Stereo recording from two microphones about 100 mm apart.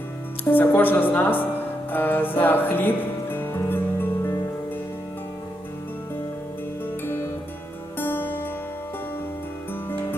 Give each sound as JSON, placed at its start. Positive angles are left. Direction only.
{"t": 0.4, "sound": "speech", "side_deg": 20}
{"t": 6.8, "sound": "music", "side_deg": 20}